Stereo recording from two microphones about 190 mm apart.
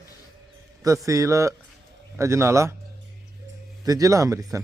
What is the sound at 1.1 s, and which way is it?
Speech, 15° right (ahead or behind).